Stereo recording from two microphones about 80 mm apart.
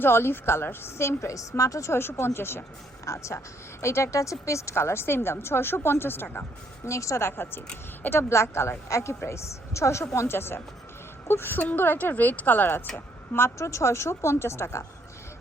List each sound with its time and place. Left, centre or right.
0.0 s a woman's voice: left
6.8 s a woman's voice: left